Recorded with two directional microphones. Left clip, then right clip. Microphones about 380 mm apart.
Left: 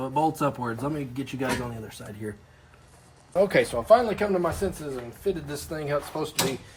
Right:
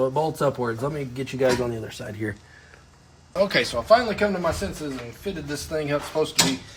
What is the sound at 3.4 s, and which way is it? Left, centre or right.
Speech, centre.